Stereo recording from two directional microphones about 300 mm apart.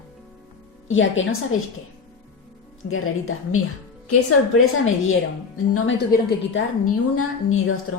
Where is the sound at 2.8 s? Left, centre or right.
Left.